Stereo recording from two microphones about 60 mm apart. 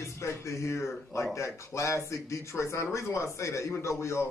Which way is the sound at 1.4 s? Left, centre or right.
Left.